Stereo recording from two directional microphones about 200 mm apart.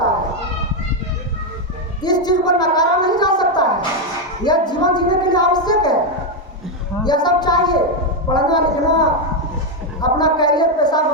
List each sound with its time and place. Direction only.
2.0 s gargling: 20° left (ahead or behind)
4.4 s a woman's voice: 20° left (ahead or behind)
7.0 s a woman's voice: 20° left (ahead or behind)
10.0 s a sound: 20° left (ahead or behind)